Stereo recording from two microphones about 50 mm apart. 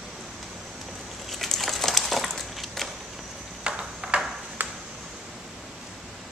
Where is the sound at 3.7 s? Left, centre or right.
Centre.